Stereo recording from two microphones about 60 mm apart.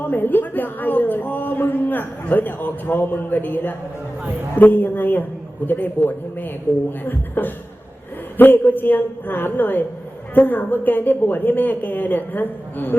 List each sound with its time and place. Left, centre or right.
0.0 s a man's voice: left